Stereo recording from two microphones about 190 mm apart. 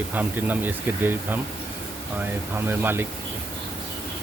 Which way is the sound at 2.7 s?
10° right (ahead or behind).